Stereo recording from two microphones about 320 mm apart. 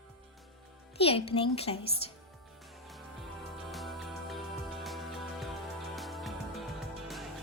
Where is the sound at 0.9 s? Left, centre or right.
Centre.